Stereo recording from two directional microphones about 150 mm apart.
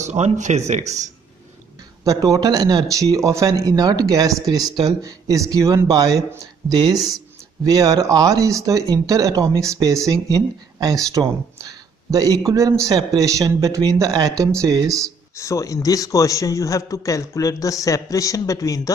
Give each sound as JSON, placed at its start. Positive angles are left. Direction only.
{"t": 0.0, "sound": "speech", "side_deg": -50}
{"t": 2.0, "sound": "a man's voice", "side_deg": -25}
{"t": 15.3, "sound": "a man's voice", "side_deg": 20}